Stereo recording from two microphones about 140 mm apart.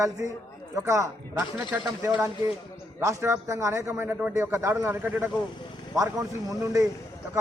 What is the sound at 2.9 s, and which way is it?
A man's voice, 20° right (ahead or behind).